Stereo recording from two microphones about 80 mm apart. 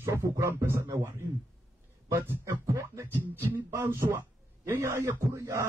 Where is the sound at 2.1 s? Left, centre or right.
Right.